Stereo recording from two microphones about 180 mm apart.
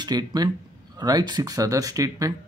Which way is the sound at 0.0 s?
25° right (ahead or behind).